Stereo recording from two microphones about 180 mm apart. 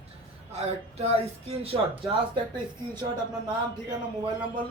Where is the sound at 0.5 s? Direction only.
35° right (ahead or behind).